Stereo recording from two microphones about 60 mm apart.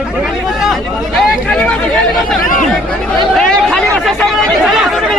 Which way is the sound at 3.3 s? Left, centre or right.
Centre.